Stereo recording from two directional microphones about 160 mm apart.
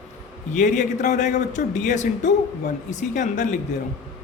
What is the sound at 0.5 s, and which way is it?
A man's voice, 50° left (ahead or behind).